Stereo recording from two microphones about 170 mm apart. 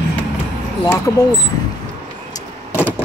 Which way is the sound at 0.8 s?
20° left (ahead or behind).